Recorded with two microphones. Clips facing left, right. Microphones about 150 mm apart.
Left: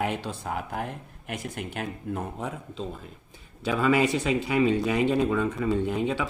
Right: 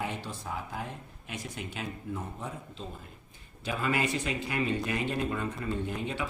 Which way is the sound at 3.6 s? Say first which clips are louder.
Left 8 dB; 90° left.